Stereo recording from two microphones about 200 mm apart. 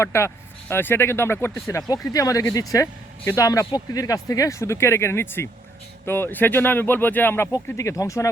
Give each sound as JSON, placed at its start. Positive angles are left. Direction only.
{"t": 0.0, "sound": "speech", "side_deg": 15}